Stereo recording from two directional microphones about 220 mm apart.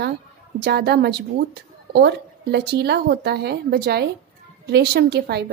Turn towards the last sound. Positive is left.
turn(degrees=-45)  # may be behind; listen again after turning